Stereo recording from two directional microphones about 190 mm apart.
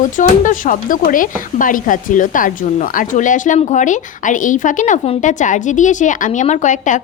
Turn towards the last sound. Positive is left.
turn(degrees=40)  # may be behind; listen again after turning